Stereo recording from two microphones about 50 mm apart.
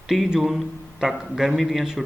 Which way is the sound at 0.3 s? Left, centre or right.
Centre.